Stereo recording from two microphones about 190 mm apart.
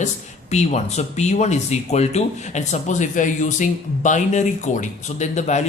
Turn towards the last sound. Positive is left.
turn(degrees=35)  # may be behind; listen again after turning